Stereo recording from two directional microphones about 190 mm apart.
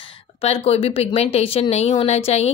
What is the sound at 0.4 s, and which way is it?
Speech, 30° left (ahead or behind).